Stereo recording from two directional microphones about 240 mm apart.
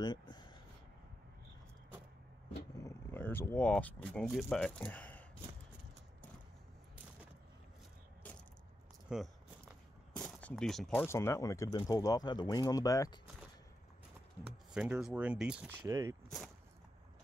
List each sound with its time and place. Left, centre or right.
0.0 s a sound: centre
2.8 s speech: centre
9.1 s speech: centre
10.1 s a sound: centre
11.1 s speech: centre
14.7 s speech: centre